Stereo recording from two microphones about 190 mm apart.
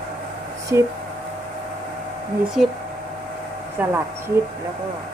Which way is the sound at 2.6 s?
5° right (ahead or behind).